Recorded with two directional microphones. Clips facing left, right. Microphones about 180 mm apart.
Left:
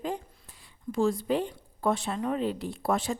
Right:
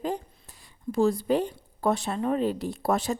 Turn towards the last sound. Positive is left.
turn(degrees=-40)  # may be behind; listen again after turning